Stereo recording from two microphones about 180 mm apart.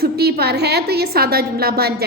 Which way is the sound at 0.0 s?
60° right (ahead or behind).